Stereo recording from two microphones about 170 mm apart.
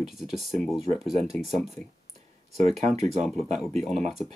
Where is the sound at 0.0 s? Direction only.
Centre (ahead or behind).